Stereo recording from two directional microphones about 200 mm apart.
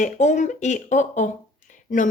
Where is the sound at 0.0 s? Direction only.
35° left (ahead or behind).